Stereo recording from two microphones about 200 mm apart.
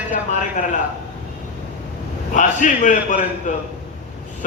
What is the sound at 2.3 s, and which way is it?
A man's voice, 40° left (ahead or behind).